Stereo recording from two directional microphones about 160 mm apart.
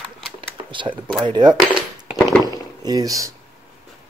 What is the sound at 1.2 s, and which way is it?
Speech, 30° right (ahead or behind).